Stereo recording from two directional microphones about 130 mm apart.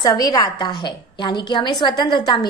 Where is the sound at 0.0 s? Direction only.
30° left (ahead or behind).